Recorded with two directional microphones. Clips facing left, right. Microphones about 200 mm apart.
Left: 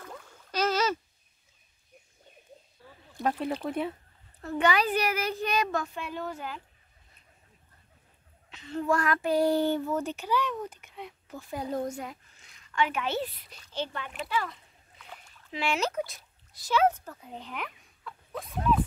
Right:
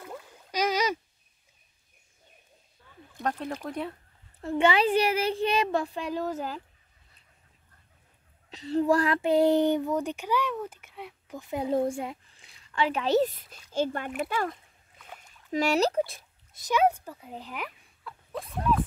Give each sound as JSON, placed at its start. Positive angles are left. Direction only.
{"t": 0.0, "sound": "a sound", "side_deg": -10}
{"t": 3.2, "sound": "speech", "side_deg": 5}
{"t": 4.4, "sound": "speech", "side_deg": -25}
{"t": 8.5, "sound": "speech", "side_deg": -35}
{"t": 11.7, "sound": "speech", "side_deg": -25}
{"t": 15.1, "sound": "a sound", "side_deg": -40}
{"t": 16.6, "sound": "speech", "side_deg": -15}